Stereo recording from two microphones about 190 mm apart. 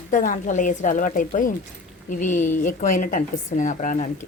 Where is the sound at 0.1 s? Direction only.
45° left (ahead or behind).